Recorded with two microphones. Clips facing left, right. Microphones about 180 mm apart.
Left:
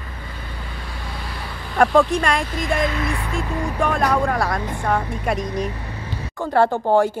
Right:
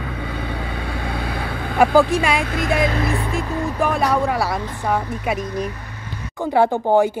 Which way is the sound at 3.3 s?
5° right (ahead or behind).